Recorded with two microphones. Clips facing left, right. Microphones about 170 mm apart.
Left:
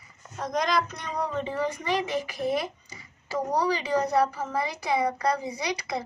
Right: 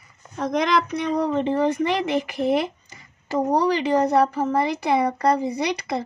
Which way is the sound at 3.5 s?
55° right (ahead or behind).